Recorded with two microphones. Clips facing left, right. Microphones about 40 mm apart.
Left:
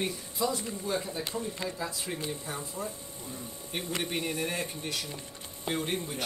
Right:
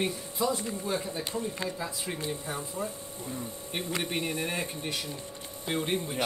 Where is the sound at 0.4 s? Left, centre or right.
Centre.